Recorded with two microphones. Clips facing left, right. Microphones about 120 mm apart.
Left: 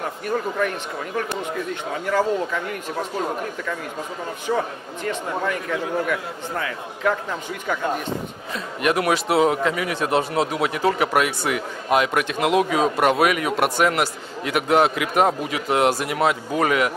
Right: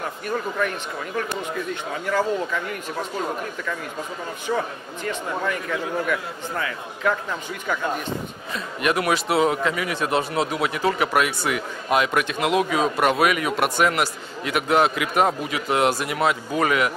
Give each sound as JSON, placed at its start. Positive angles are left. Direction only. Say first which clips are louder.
{"t": 0.0, "sound": "speech", "louder": "left 2 dB", "side_deg": 35}
{"t": 8.5, "sound": "speech", "louder": "left 1 dB", "side_deg": 45}